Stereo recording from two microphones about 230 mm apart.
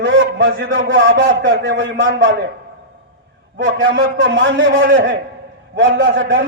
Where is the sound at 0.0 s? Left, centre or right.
Right.